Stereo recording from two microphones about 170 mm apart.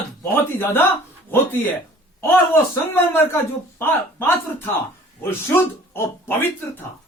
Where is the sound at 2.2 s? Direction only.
15° left (ahead or behind).